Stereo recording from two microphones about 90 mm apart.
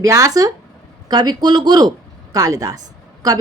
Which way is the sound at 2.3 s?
40° right (ahead or behind).